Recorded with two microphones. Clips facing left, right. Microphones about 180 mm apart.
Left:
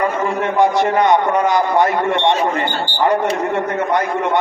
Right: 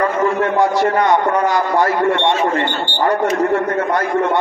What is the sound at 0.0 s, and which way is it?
A man's voice, 20° left (ahead or behind).